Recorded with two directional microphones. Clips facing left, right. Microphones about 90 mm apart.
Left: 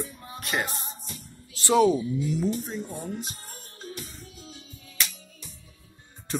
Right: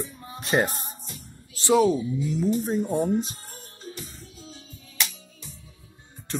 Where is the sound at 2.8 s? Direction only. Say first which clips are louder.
Right 11 dB; 60° right (ahead or behind).